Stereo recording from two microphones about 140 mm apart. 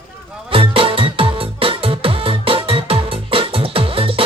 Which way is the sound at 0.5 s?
40° right (ahead or behind).